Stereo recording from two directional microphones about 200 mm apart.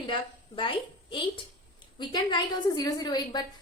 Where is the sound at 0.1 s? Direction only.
25° left (ahead or behind).